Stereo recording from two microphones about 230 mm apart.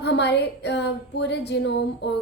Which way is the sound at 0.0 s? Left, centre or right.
Left.